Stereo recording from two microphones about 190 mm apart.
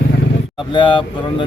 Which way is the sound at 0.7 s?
25° left (ahead or behind).